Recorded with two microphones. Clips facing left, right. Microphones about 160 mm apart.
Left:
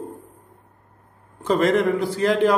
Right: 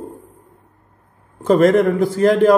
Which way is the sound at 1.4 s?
45° right (ahead or behind).